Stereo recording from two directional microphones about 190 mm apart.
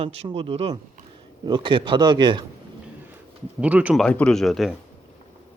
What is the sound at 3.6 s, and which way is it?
Speech, 10° right (ahead or behind).